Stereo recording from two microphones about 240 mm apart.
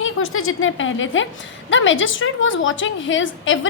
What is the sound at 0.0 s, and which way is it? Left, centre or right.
A woman's voice, left.